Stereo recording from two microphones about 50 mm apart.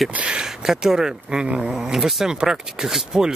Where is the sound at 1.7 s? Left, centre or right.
Centre.